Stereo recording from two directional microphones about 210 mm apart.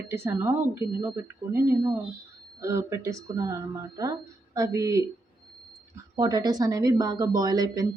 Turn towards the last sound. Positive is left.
turn(degrees=-15)  # may be behind; listen again after turning